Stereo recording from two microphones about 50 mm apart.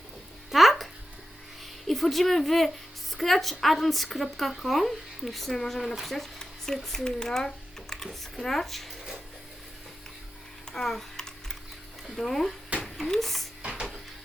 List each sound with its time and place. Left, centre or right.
0.5 s music: centre
1.6 s speech: centre
10.7 s typing: centre
12.0 s speech: centre
13.6 s printer: centre